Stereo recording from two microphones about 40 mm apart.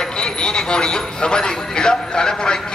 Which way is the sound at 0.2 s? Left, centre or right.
Centre.